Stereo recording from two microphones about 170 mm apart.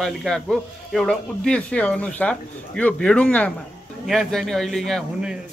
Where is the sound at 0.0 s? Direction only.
5° left (ahead or behind).